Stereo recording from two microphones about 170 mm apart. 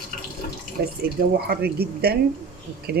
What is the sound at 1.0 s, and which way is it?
Speech, 65° right (ahead or behind).